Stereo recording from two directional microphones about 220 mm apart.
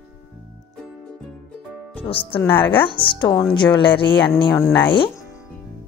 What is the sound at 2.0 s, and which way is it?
A woman's voice, 25° left (ahead or behind).